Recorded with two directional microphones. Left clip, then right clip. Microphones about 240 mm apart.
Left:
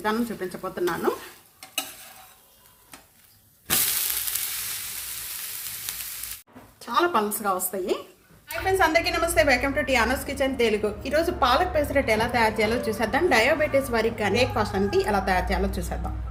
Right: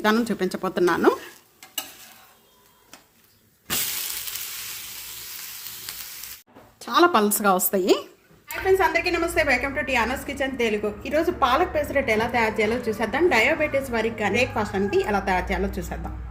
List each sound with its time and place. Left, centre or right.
0.0 s speech: right
6.7 s a woman's voice: right
8.8 s a woman's voice: centre